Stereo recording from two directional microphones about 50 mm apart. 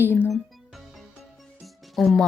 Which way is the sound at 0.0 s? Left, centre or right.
Left.